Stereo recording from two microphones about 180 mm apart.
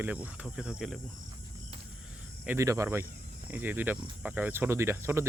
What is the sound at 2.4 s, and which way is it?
Speech, 15° right (ahead or behind).